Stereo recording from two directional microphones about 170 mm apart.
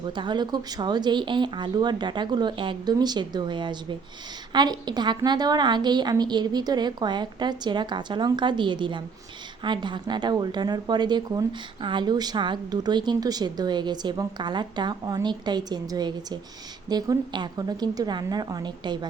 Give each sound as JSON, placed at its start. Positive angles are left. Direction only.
{"t": 0.1, "sound": "a woman's voice", "side_deg": -25}